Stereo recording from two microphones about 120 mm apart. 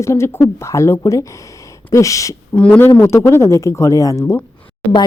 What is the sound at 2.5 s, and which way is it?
Speech, 10° left (ahead or behind).